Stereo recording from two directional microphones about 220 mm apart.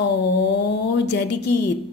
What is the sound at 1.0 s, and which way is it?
Speech, 50° left (ahead or behind).